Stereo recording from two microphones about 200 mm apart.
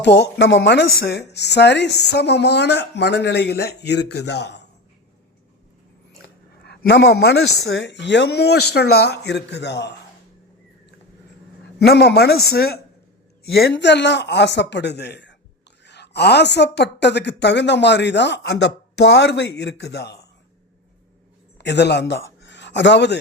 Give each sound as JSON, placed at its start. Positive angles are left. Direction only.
{"t": 0.0, "sound": "speech", "side_deg": 60}
{"t": 6.7, "sound": "speech", "side_deg": 60}
{"t": 11.6, "sound": "a woman's voice", "side_deg": 55}
{"t": 21.6, "sound": "a man's voice", "side_deg": 60}